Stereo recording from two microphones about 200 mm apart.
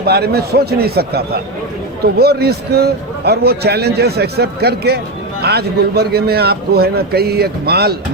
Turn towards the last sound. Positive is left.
turn(degrees=-50)  # may be behind; listen again after turning